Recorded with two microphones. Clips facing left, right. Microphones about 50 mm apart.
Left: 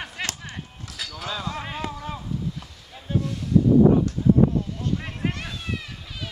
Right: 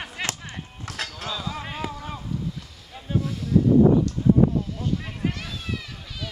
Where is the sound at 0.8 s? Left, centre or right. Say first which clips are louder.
Right 6 dB; right.